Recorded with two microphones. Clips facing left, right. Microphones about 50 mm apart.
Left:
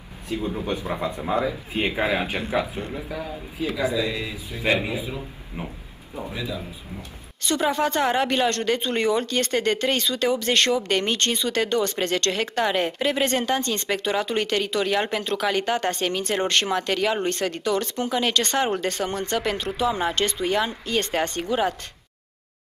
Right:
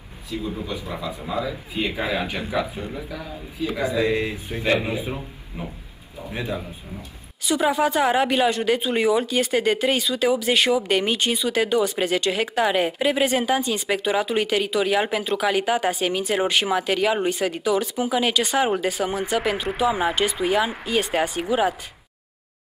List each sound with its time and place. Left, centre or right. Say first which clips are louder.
0.6 s a man's voice: left 3 dB; left
3.9 s speech: right 4 dB; right
5.6 s a man's voice: even; left
6.3 s a man's voice: right 4 dB; right
7.4 s a woman's voice: right 2 dB; centre